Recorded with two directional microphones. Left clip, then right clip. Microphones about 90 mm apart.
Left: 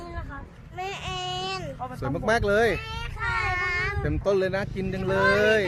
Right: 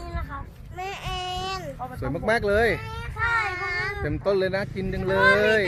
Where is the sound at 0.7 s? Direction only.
30° right (ahead or behind).